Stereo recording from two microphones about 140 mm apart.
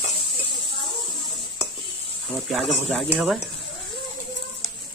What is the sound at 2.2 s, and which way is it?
Speech, centre (ahead or behind).